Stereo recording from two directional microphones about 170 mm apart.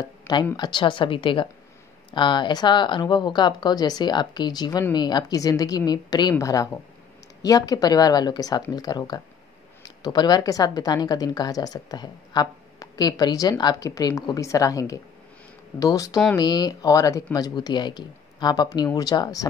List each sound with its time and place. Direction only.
0.0 s speech: 20° left (ahead or behind)